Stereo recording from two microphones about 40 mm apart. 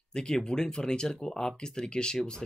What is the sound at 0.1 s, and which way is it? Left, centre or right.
Speech, centre.